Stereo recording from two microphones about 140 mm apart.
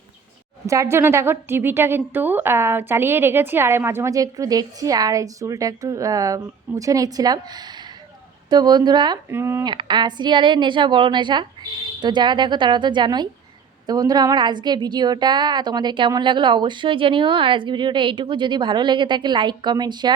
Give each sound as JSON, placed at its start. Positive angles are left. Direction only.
{"t": 0.7, "sound": "a woman's voice", "side_deg": -20}
{"t": 9.3, "sound": "speech", "side_deg": -15}
{"t": 9.6, "sound": "a woman's voice", "side_deg": -30}